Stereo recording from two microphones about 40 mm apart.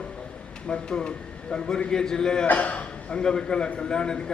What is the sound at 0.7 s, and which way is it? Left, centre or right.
A man's voice, left.